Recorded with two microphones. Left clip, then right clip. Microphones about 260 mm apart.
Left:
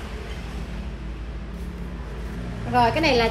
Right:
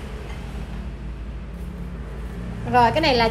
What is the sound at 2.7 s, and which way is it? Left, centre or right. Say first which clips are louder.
Speech: right 2 dB; right.